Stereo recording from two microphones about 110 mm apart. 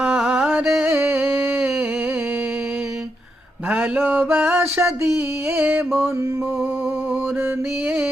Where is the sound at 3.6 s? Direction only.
15° right (ahead or behind).